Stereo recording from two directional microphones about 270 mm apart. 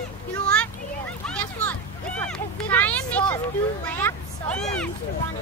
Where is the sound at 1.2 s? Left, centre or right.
Centre.